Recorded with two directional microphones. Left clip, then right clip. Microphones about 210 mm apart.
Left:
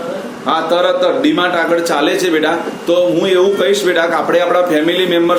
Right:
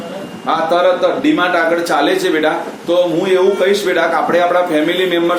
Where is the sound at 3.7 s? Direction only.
15° left (ahead or behind).